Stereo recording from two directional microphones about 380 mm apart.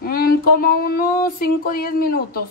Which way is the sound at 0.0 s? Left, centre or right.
Left.